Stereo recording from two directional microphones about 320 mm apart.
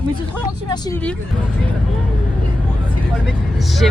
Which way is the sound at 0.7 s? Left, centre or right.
Centre.